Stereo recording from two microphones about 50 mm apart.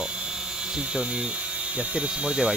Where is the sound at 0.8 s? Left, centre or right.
Centre.